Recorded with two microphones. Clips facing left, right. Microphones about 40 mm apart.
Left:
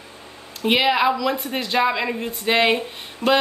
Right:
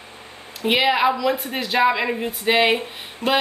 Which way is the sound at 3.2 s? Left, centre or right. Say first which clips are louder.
Left 2 dB; right.